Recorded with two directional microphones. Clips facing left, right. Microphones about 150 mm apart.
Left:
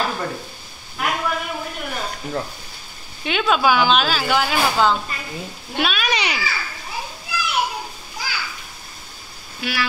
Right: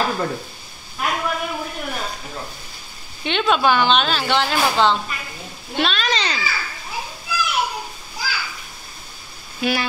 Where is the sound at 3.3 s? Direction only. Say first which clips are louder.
Even; 5° left (ahead or behind).